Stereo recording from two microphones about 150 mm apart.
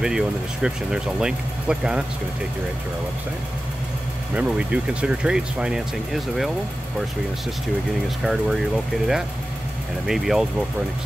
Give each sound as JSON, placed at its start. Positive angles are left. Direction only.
{"t": 0.0, "sound": "speech", "side_deg": -5}
{"t": 4.4, "sound": "speech", "side_deg": -10}
{"t": 8.2, "sound": "speech", "side_deg": 0}